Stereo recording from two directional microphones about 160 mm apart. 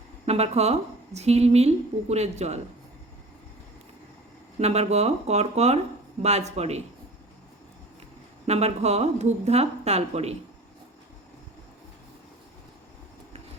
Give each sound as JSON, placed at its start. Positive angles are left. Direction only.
{"t": 0.3, "sound": "a woman's voice", "side_deg": -40}
{"t": 4.6, "sound": "a woman's voice", "side_deg": -40}
{"t": 8.4, "sound": "a woman's voice", "side_deg": -40}